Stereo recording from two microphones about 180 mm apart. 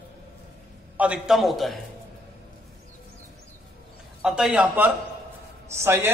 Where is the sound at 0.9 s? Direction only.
5° right (ahead or behind).